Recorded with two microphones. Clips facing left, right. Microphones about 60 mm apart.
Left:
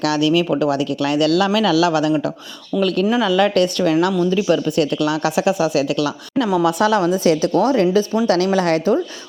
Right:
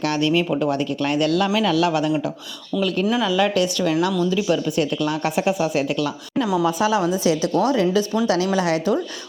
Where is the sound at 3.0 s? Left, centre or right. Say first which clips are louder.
Left 3 dB; left.